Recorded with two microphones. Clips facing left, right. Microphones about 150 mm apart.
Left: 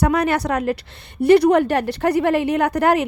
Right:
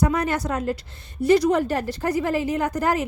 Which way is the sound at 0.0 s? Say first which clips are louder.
Left 4 dB; 70° left (ahead or behind).